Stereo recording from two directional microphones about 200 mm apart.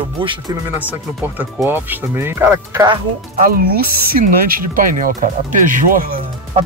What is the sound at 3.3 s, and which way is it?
Speech, 45° right (ahead or behind).